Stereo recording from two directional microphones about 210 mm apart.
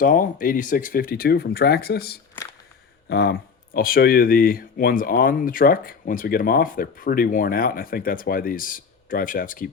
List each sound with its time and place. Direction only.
0.0 s speech: 40° left (ahead or behind)